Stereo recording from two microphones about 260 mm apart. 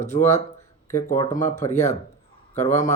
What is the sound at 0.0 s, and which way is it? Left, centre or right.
Speech, left.